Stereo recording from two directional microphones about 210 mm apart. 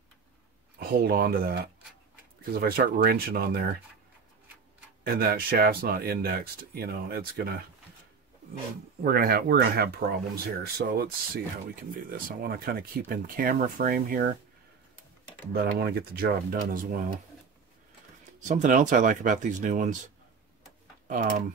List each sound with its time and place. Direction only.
0.7 s speech: 45° right (ahead or behind)
5.0 s speech: 45° right (ahead or behind)
9.0 s speech: 45° right (ahead or behind)
15.5 s speech: 50° right (ahead or behind)
18.5 s speech: 35° right (ahead or behind)